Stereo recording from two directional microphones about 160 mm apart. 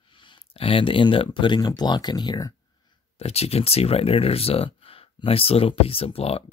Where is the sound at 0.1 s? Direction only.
30° left (ahead or behind).